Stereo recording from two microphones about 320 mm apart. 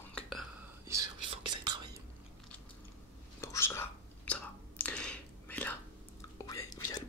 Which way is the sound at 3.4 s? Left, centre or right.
Centre.